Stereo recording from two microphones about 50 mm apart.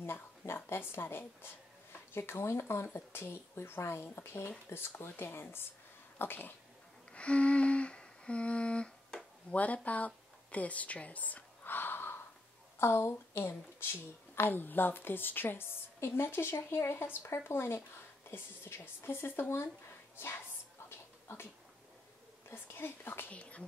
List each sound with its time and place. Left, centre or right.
0.0 s a sound: left
0.7 s speech: left
7.1 s humming: left
9.5 s speech: left
22.5 s a woman's voice: left
23.2 s speech: left